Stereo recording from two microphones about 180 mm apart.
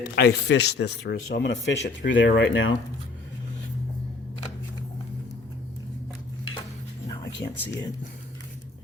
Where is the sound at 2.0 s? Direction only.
90° left.